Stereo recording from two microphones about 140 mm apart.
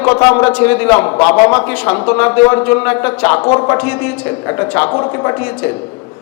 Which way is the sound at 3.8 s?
15° left (ahead or behind).